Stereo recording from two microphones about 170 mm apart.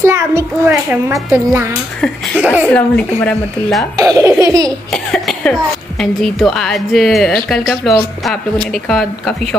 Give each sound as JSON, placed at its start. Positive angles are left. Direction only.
{"t": 0.0, "sound": "a child's voice", "side_deg": -15}
{"t": 2.7, "sound": "a woman's voice", "side_deg": 10}
{"t": 3.9, "sound": "speech", "side_deg": -20}
{"t": 4.6, "sound": "a woman's voice", "side_deg": 5}